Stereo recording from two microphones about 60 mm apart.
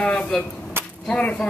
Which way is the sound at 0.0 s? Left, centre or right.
Left.